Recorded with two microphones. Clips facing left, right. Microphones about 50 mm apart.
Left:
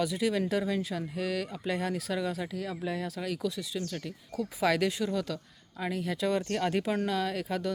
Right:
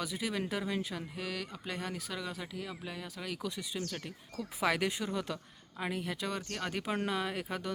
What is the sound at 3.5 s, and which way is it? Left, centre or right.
Speech, centre.